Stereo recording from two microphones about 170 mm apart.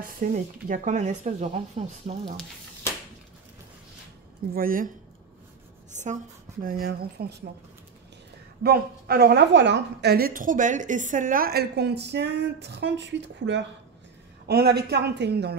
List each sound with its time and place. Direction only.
0.0 s speech: 55° right (ahead or behind); by 2.3 s 35° right (ahead or behind)
4.6 s speech: 55° right (ahead or behind)
5.9 s a sound: 45° right (ahead or behind)
6.6 s speech: 60° right (ahead or behind)
8.6 s a woman's voice: 65° right (ahead or behind); by 13.7 s 90° right
14.5 s a woman's voice: 70° right (ahead or behind)